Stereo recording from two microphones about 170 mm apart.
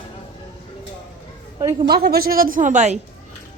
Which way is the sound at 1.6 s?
20° right (ahead or behind).